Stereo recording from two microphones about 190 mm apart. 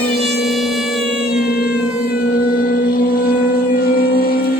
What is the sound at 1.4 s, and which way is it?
Cat, 55° left (ahead or behind).